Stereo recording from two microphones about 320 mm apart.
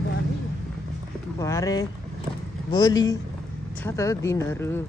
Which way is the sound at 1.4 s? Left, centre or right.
Centre.